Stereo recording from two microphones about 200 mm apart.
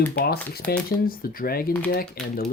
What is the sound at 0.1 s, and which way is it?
Speech, 50° left (ahead or behind).